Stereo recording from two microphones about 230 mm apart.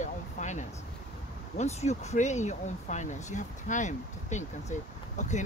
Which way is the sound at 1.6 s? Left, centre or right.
Left.